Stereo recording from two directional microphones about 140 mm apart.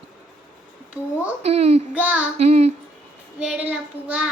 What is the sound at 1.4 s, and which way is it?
Speech, 50° right (ahead or behind).